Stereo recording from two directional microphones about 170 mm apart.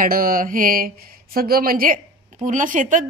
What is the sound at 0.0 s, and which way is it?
Speech, 55° right (ahead or behind).